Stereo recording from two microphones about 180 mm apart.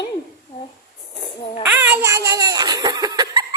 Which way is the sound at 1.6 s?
10° right (ahead or behind).